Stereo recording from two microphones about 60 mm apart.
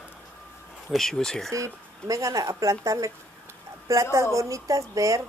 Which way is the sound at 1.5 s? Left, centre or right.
Right.